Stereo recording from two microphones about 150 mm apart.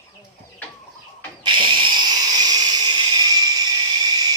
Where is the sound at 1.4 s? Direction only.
30° right (ahead or behind).